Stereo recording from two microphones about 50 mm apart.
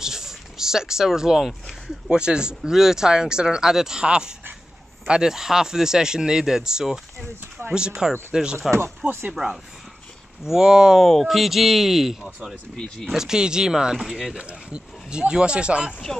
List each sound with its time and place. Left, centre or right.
0.0 s a sound: centre
2.0 s speech: centre
11.0 s speech: centre
12.7 s speech: centre
13.1 s speech: centre
14.4 s speech: right
16.1 s speech: centre